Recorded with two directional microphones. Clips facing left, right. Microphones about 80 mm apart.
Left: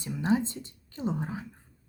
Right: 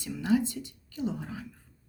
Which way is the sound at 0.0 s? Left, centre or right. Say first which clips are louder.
Even; left.